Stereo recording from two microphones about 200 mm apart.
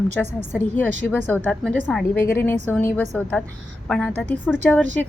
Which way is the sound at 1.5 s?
5° left (ahead or behind).